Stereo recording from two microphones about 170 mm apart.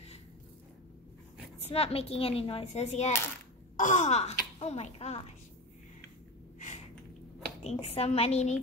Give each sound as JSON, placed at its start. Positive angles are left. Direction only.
{"t": 1.6, "sound": "speech", "side_deg": 35}
{"t": 7.6, "sound": "speech", "side_deg": 35}